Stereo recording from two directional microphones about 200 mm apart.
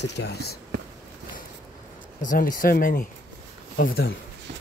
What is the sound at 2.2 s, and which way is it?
Speech, 40° left (ahead or behind).